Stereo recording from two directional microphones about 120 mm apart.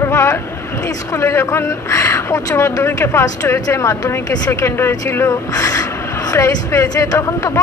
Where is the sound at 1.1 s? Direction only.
25° left (ahead or behind).